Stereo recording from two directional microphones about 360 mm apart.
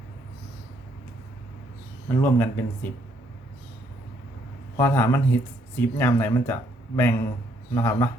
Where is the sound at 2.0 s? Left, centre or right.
Centre.